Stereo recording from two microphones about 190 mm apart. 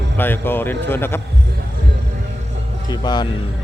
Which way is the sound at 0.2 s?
10° left (ahead or behind).